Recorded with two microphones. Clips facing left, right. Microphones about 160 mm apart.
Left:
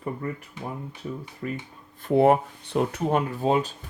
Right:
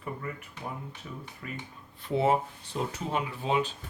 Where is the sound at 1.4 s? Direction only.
40° left (ahead or behind).